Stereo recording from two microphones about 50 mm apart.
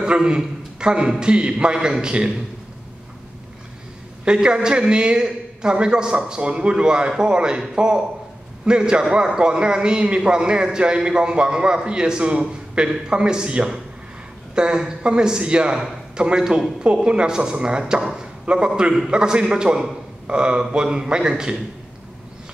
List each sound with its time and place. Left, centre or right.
0.0 s a man's voice: centre
4.2 s a man's voice: centre